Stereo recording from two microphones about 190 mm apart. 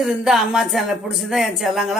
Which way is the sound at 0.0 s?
Centre (ahead or behind).